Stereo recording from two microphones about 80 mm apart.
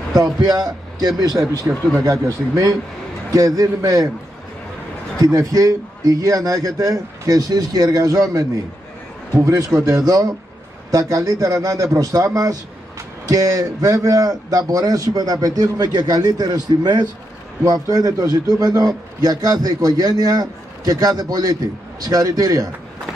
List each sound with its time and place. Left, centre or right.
0.4 s a man's voice: right
1.7 s speech: right
2.0 s a man's voice: right
5.2 s a man's voice: right
13.3 s a man's voice: right